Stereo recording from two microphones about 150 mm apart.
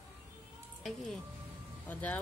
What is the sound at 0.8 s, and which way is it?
Speech, centre (ahead or behind).